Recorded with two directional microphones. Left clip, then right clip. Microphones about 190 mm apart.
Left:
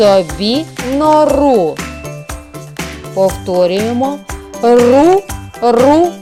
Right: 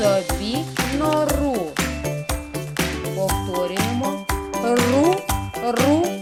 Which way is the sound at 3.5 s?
30° left (ahead or behind).